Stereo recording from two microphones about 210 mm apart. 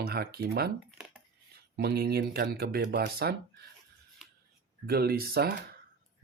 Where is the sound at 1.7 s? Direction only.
50° right (ahead or behind).